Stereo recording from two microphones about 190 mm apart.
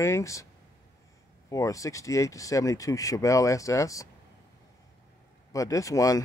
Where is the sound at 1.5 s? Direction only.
15° left (ahead or behind).